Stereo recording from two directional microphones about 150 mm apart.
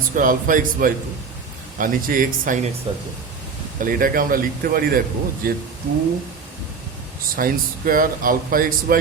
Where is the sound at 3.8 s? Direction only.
70° right (ahead or behind).